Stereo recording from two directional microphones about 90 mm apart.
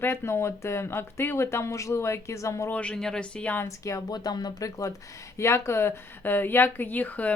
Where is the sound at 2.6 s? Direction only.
15° left (ahead or behind).